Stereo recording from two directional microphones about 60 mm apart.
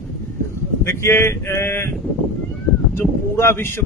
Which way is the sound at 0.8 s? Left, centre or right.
Left.